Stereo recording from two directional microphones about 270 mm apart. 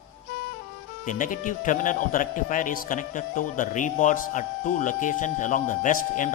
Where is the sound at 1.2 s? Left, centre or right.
Left.